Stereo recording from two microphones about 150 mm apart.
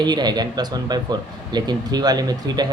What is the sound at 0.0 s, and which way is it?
Speech, 30° right (ahead or behind).